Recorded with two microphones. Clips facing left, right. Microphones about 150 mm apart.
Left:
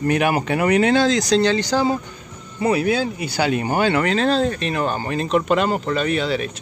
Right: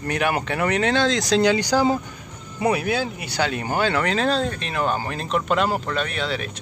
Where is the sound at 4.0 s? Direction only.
Centre (ahead or behind).